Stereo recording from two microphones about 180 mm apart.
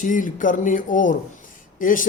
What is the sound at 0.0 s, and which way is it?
Speech, 45° left (ahead or behind).